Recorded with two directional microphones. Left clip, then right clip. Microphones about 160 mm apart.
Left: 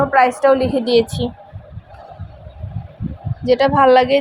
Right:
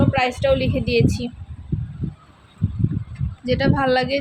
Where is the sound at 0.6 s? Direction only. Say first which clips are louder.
Left 5 dB; 15° left (ahead or behind).